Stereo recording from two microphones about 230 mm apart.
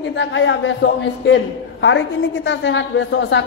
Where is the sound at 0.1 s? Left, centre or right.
Left.